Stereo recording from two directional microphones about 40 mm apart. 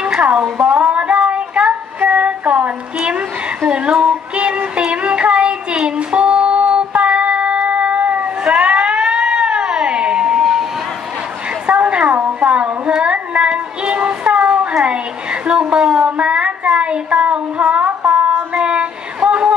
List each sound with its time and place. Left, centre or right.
0.2 s child singing: right
3.6 s speech: right
4.0 s music: right
4.7 s child singing: right
7.6 s cat: right
8.7 s cat: centre
10.2 s a sound: centre
11.6 s a sound: right